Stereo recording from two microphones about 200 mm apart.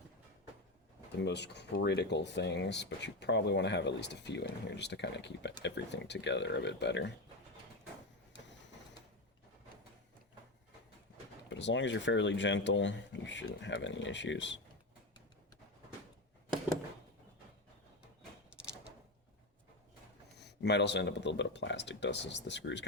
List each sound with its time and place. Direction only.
1.2 s speech: 60° left (ahead or behind)
11.4 s speech: 65° left (ahead or behind)
20.4 s speech: 60° left (ahead or behind)